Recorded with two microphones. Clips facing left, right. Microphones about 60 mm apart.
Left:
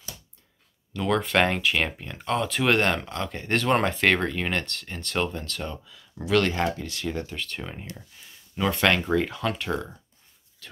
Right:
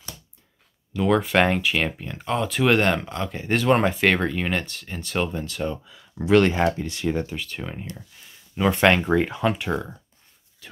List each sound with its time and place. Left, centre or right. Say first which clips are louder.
0.9 s speech: right 3 dB; centre
7.3 s speech: right 2 dB; centre
8.5 s speech: right 4 dB; right
10.6 s a sound: right 1 dB; centre